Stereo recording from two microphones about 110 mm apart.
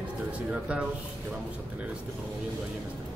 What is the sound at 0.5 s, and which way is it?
Speech, 10° right (ahead or behind).